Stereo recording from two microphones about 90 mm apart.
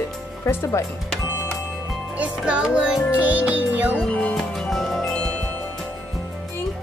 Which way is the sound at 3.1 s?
15° right (ahead or behind).